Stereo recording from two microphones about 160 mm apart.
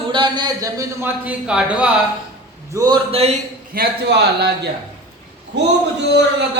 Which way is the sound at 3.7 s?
90° right.